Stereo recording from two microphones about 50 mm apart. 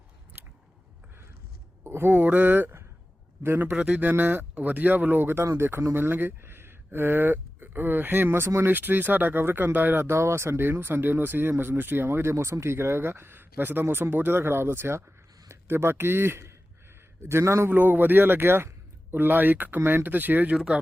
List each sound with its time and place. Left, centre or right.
0.3 s biting: right
1.8 s speech: right
2.1 s speech: right
3.7 s speech: right
4.1 s speech: right
5.4 s a man's voice: right
17.7 s speech: right
19.1 s speech: right